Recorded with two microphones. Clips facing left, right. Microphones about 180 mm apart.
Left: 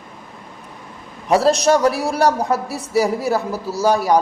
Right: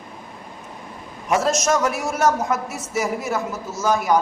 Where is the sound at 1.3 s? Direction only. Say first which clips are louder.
Left 5 dB; 35° left (ahead or behind).